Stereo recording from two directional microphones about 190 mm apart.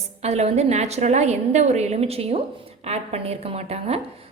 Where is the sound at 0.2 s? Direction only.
35° right (ahead or behind).